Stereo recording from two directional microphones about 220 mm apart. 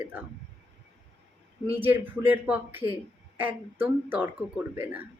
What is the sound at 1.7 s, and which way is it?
Speech, 10° right (ahead or behind).